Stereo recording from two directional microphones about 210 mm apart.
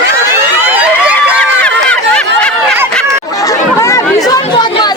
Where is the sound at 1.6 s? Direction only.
5° left (ahead or behind).